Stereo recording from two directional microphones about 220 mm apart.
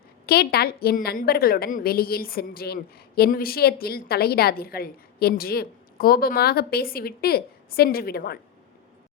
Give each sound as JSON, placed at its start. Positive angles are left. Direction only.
{"t": 0.3, "sound": "a woman's voice", "side_deg": 45}